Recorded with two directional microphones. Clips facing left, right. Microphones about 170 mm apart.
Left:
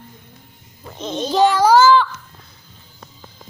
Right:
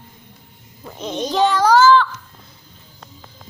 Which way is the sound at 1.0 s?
15° right (ahead or behind).